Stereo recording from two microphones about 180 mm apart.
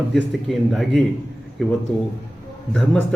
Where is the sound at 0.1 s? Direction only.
Centre (ahead or behind).